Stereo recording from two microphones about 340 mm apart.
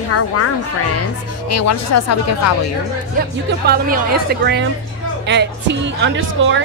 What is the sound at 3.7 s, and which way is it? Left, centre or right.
A woman's voice, right.